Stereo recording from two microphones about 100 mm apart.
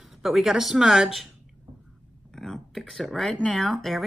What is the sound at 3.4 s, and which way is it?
Speech, centre (ahead or behind).